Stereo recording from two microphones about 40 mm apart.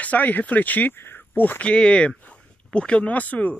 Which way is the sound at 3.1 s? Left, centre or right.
Left.